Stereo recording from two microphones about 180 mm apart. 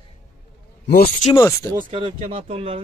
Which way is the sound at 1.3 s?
15° left (ahead or behind).